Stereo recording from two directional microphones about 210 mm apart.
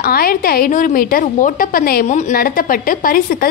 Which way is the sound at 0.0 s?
45° left (ahead or behind).